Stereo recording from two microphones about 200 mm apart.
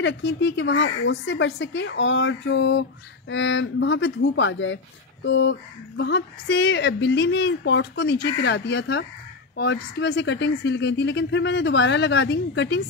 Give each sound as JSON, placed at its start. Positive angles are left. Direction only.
{"t": 0.0, "sound": "speech", "side_deg": 60}